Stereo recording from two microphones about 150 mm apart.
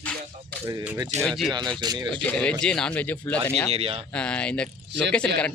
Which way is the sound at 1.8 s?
30° right (ahead or behind).